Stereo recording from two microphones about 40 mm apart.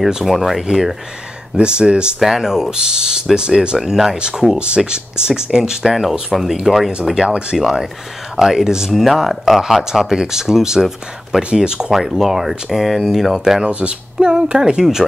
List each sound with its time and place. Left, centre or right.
0.2 s speech: centre
1.6 s speech: right
2.1 s speech: centre
3.9 s speech: centre
4.2 s speech: centre
7.2 s speech: right
7.5 s speech: centre
8.9 s speech: centre
11.9 s speech: centre
13.4 s speech: centre
13.7 s speech: right